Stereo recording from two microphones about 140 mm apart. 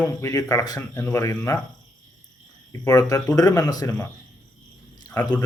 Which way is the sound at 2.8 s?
25° left (ahead or behind).